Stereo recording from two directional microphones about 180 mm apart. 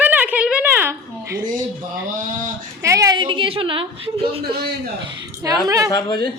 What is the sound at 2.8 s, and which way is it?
A woman's voice, 20° right (ahead or behind).